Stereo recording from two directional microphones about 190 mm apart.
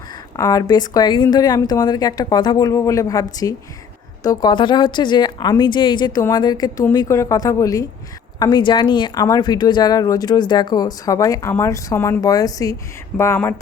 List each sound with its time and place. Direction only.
0.3 s a woman's voice: 15° left (ahead or behind)